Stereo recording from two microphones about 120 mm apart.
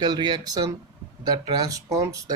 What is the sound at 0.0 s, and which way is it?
Speech, 35° right (ahead or behind).